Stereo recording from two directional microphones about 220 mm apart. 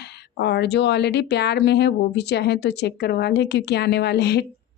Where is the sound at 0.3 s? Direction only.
50° left (ahead or behind).